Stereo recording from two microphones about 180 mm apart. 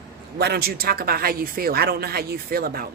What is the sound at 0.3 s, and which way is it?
A woman's voice, 60° right (ahead or behind).